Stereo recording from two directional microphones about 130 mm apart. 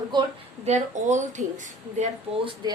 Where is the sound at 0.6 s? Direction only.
60° right (ahead or behind).